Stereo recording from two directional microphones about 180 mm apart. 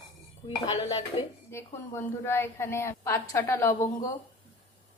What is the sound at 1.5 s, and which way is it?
A woman's voice, 15° left (ahead or behind).